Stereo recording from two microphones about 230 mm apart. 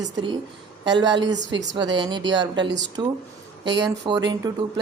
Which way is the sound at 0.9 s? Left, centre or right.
Centre.